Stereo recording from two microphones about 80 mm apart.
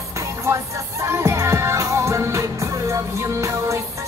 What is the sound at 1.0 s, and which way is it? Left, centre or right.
Music, right.